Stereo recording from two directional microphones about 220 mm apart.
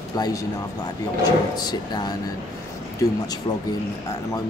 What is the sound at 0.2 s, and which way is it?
Speech, 15° left (ahead or behind).